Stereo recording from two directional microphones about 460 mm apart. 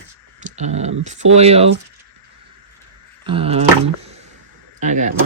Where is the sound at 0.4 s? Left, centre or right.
Centre.